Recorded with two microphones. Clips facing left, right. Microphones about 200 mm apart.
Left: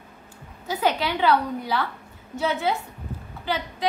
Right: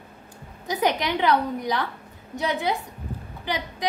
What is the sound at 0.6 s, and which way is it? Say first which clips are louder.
A woman's voice: even; 15° right (ahead or behind).